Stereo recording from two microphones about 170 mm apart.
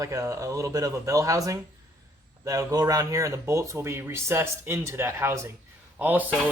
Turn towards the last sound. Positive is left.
turn(degrees=-10)  # may be behind; listen again after turning